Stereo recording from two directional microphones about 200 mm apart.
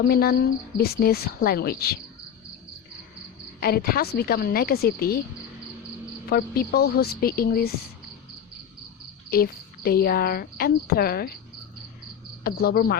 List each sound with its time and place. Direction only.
0.1 s speech: 50° left (ahead or behind)
3.6 s speech: 50° left (ahead or behind)
6.2 s speech: 50° left (ahead or behind)
9.3 s speech: 50° left (ahead or behind)
12.4 s speech: 50° left (ahead or behind)